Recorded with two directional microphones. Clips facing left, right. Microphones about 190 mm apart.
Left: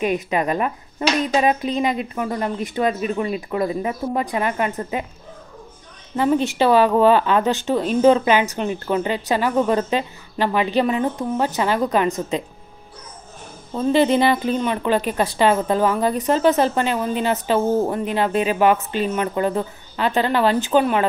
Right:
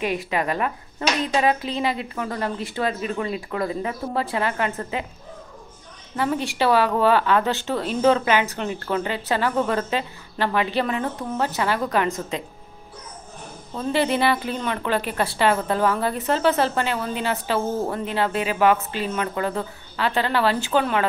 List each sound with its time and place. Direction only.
0.0 s a woman's voice: 20° left (ahead or behind)
6.1 s speech: 20° left (ahead or behind)
13.7 s a woman's voice: 20° left (ahead or behind)